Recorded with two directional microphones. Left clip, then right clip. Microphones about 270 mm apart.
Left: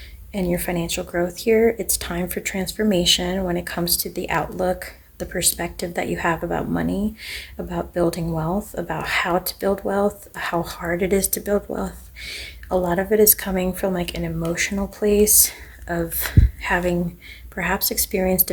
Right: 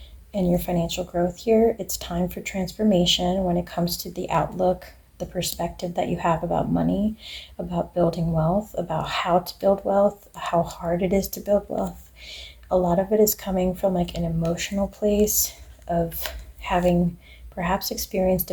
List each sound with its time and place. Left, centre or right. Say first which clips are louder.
0.3 s speech: even; left